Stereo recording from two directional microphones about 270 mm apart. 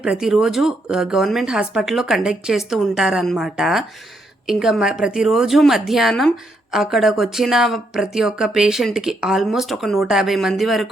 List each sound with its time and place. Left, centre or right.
0.0 s a woman's voice: centre